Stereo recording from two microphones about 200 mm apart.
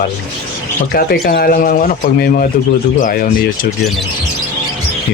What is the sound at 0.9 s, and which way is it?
Speech, 50° left (ahead or behind).